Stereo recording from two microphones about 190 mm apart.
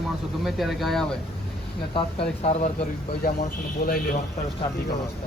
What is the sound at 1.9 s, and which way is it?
Speech, 30° left (ahead or behind).